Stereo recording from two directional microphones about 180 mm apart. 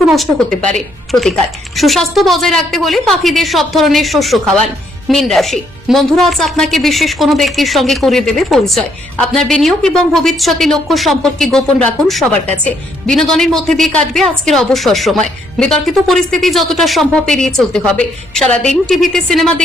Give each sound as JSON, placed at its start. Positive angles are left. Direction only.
{"t": 0.1, "sound": "a woman's voice", "side_deg": 0}